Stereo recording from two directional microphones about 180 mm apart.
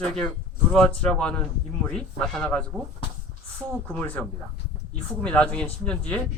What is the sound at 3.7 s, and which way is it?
Speech, 10° left (ahead or behind).